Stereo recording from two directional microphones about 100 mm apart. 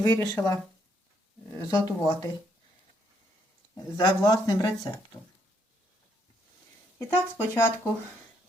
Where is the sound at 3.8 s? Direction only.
40° left (ahead or behind).